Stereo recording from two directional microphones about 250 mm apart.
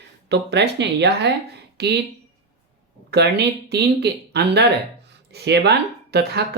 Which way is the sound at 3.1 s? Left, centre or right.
Right.